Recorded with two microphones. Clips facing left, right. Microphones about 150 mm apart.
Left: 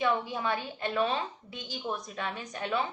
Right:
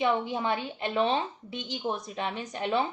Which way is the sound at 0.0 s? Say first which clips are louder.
Right 2 dB; 25° right (ahead or behind).